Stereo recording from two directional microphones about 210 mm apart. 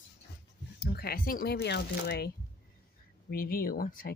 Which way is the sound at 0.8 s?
50° left (ahead or behind).